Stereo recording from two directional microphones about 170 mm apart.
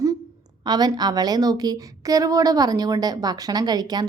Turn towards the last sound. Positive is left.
turn(degrees=-25)  # may be behind; listen again after turning